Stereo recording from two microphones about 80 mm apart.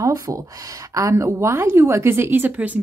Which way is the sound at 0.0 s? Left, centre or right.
Right.